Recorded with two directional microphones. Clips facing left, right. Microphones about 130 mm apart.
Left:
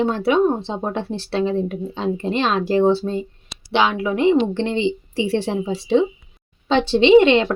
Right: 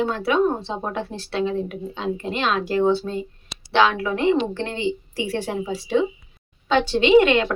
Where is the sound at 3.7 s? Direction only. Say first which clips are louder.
Even; 15° left (ahead or behind).